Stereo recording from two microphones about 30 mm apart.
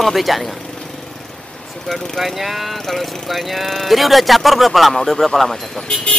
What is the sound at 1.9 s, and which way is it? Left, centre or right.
Speech, centre.